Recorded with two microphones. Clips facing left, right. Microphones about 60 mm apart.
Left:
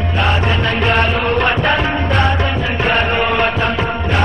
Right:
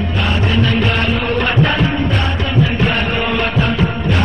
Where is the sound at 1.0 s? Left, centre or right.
Centre.